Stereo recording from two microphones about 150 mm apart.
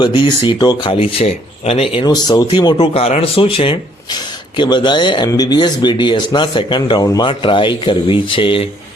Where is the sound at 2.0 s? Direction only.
25° left (ahead or behind).